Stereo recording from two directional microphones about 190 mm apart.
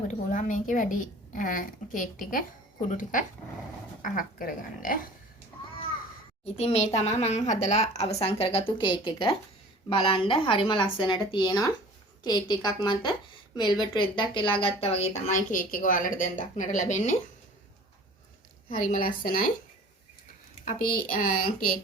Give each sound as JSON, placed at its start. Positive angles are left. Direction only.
{"t": 0.1, "sound": "a woman's voice", "side_deg": 40}
{"t": 6.4, "sound": "a woman's voice", "side_deg": 35}
{"t": 18.8, "sound": "a woman's voice", "side_deg": 45}
{"t": 20.7, "sound": "a woman's voice", "side_deg": 45}